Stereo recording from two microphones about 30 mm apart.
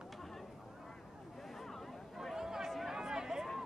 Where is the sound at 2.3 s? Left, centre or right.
Centre.